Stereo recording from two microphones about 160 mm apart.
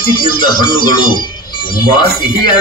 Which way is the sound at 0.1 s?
30° left (ahead or behind).